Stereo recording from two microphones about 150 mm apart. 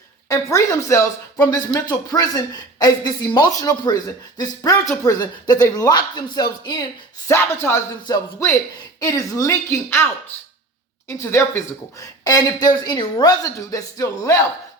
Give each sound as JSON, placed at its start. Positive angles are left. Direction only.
{"t": 0.3, "sound": "speech", "side_deg": 20}
{"t": 7.3, "sound": "speech", "side_deg": 15}
{"t": 11.1, "sound": "speech", "side_deg": 20}